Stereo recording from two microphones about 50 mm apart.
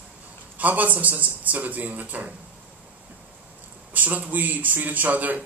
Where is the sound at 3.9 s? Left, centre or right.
Right.